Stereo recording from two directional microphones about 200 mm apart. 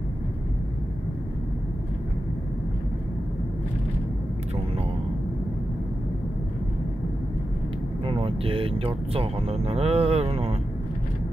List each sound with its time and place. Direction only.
8.0 s speech: 25° right (ahead or behind)